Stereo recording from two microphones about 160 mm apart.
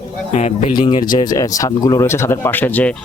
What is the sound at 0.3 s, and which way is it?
Speech, 45° left (ahead or behind).